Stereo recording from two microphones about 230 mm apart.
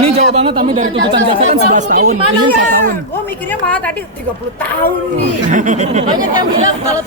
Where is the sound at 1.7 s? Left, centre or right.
Right.